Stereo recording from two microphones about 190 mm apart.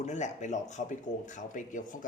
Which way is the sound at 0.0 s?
40° left (ahead or behind).